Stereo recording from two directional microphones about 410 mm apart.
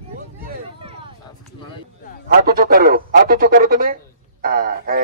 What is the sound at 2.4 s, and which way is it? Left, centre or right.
Speech, right.